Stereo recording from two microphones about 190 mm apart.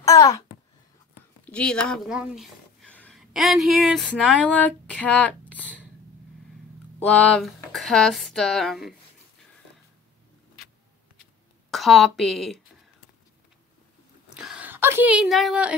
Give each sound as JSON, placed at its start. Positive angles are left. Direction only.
{"t": 0.0, "sound": "babbling", "side_deg": 15}
{"t": 1.4, "sound": "speech", "side_deg": 5}
{"t": 7.1, "sound": "speech", "side_deg": 0}
{"t": 11.7, "sound": "speech", "side_deg": 0}
{"t": 14.3, "sound": "a sound", "side_deg": -5}